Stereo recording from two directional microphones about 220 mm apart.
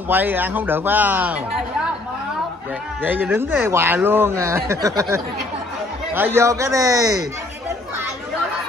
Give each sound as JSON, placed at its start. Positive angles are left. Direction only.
{"t": 0.1, "sound": "speech", "side_deg": -10}
{"t": 3.0, "sound": "speech", "side_deg": -10}